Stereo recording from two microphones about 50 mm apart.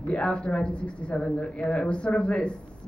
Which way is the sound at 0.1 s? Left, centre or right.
Left.